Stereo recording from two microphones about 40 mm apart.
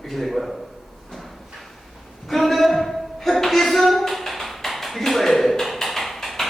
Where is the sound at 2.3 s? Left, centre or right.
Centre.